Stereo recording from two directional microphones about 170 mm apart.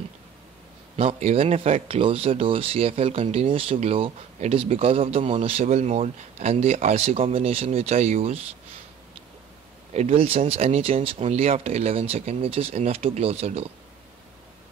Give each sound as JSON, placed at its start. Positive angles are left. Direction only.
{"t": 0.9, "sound": "speech", "side_deg": -35}
{"t": 9.9, "sound": "speech", "side_deg": -35}